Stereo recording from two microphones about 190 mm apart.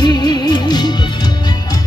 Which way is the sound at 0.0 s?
25° left (ahead or behind).